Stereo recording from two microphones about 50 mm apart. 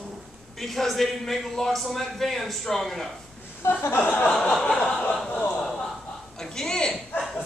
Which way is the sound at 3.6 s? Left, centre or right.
Left.